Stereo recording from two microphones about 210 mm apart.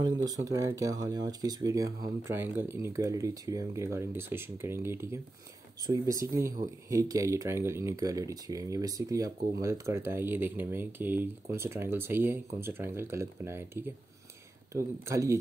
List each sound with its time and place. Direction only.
0.0 s speech: 20° right (ahead or behind)